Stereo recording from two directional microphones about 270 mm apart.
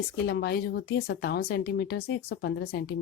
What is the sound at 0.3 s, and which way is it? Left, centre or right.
Speech, left.